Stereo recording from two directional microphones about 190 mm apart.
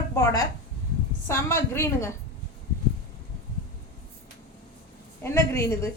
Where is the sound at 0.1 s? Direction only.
15° left (ahead or behind).